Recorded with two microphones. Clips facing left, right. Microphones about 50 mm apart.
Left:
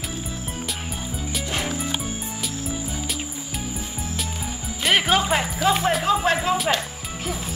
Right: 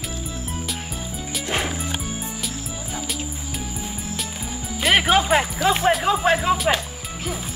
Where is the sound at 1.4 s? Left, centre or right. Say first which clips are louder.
Right 4 dB; centre.